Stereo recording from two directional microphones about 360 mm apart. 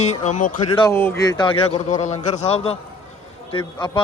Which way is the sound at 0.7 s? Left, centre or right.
Centre.